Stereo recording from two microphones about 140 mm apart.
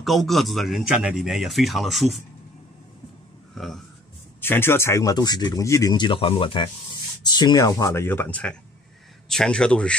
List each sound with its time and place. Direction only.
0.0 s a man's voice: centre (ahead or behind)
3.5 s a man's voice: centre (ahead or behind)
4.4 s speech: 15° left (ahead or behind)